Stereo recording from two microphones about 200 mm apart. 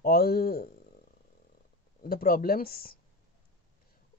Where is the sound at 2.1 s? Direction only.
45° left (ahead or behind).